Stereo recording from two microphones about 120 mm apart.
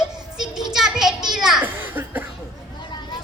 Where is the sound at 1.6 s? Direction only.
15° right (ahead or behind).